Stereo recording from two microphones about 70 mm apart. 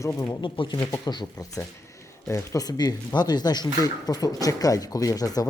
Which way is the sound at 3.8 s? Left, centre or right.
Left.